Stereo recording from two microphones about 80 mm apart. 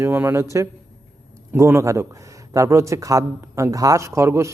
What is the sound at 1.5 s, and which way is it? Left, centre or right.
A man's voice, right.